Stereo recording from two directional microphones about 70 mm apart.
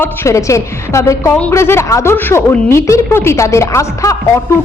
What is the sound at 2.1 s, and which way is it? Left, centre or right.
A woman's voice, left.